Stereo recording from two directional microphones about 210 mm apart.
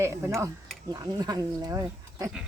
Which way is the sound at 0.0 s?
15° right (ahead or behind).